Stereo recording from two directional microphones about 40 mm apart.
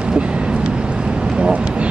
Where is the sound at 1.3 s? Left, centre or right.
Right.